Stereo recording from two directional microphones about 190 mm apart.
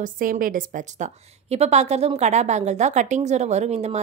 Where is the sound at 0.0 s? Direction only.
45° right (ahead or behind).